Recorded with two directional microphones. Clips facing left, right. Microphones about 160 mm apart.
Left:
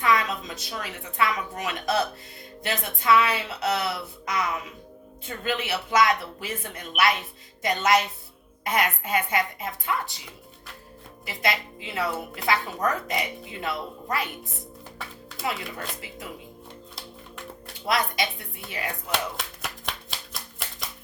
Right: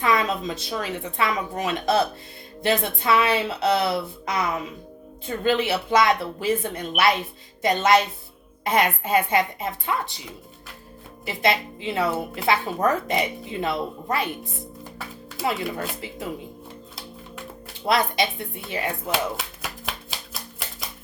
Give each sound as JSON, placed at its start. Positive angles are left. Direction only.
{"t": 0.0, "sound": "a woman's voice", "side_deg": -25}
{"t": 11.3, "sound": "a woman's voice", "side_deg": -25}
{"t": 16.0, "sound": "a woman's voice", "side_deg": -30}
{"t": 17.8, "sound": "a woman's voice", "side_deg": -25}
{"t": 19.1, "sound": "a sound", "side_deg": -5}